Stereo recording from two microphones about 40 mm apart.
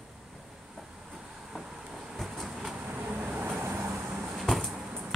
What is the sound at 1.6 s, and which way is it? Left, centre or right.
Vehicle, centre.